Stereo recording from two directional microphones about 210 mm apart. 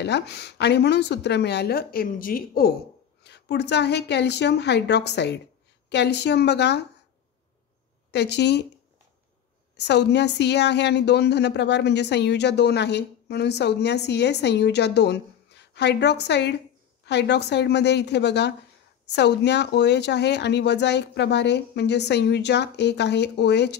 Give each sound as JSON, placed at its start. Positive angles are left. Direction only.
{"t": 0.0, "sound": "a woman's voice", "side_deg": 50}
{"t": 8.1, "sound": "a woman's voice", "side_deg": 55}
{"t": 9.8, "sound": "a woman's voice", "side_deg": 55}